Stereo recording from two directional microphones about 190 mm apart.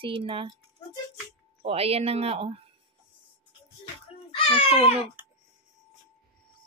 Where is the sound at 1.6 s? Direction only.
30° right (ahead or behind).